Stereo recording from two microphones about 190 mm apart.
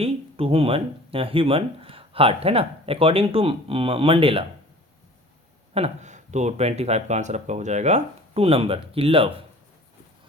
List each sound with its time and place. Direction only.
0.0 s speech: 30° right (ahead or behind)
5.7 s speech: 35° right (ahead or behind)